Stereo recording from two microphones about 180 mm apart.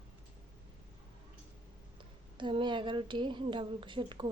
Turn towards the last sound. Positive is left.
turn(degrees=-25)  # may be behind; listen again after turning